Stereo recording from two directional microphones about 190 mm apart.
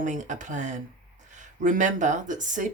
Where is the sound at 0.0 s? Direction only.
40° right (ahead or behind).